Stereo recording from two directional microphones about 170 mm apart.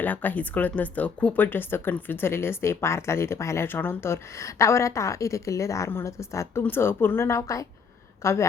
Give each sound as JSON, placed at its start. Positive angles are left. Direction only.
{"t": 0.0, "sound": "speech", "side_deg": 10}